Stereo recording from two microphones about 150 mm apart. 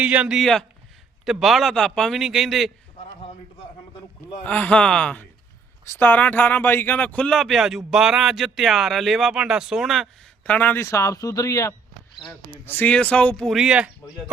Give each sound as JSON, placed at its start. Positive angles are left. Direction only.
{"t": 0.0, "sound": "speech", "side_deg": -10}
{"t": 4.4, "sound": "speech", "side_deg": 10}
{"t": 10.4, "sound": "speech", "side_deg": 10}
{"t": 12.6, "sound": "speech", "side_deg": 10}